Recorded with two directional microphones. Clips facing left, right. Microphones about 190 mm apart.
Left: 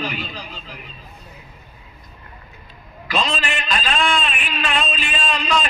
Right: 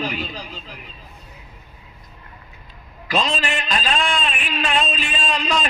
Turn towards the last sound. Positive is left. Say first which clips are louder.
# left 1 dB
turn(degrees=-40)  # may be behind; listen again after turning